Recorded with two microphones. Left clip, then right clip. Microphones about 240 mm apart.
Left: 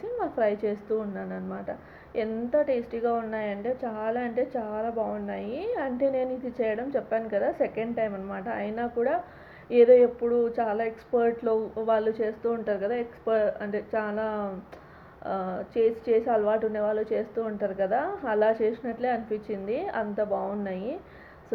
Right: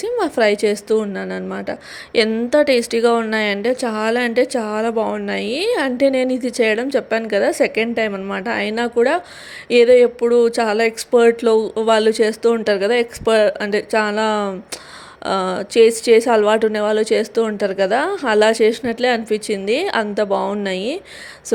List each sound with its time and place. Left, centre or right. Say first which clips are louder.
0.0 s speech: right 10 dB; right